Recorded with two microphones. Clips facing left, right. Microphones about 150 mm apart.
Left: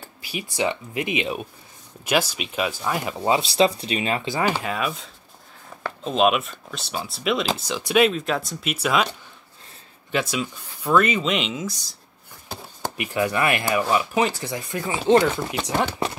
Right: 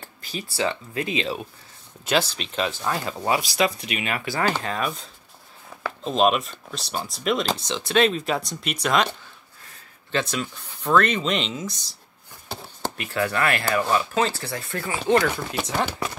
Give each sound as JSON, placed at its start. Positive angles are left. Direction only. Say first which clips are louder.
{"t": 0.2, "sound": "speech", "louder": "left 1 dB", "side_deg": 10}
{"t": 10.1, "sound": "speech", "louder": "left 1 dB", "side_deg": 10}
{"t": 12.9, "sound": "speech", "louder": "left 2 dB", "side_deg": 15}
{"t": 15.6, "sound": "speech", "louder": "left 2 dB", "side_deg": 15}